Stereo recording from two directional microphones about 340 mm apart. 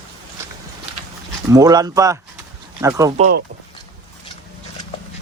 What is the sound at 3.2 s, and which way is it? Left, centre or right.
Speech, right.